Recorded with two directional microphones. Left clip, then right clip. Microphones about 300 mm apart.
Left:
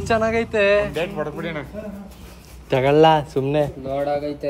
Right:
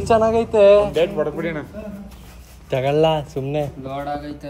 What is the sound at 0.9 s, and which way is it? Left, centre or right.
Speech, left.